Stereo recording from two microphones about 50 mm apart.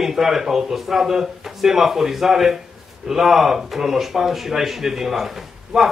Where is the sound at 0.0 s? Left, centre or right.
Centre.